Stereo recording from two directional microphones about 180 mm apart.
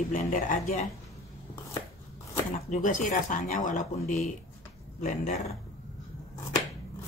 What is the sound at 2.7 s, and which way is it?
Speech, 45° left (ahead or behind).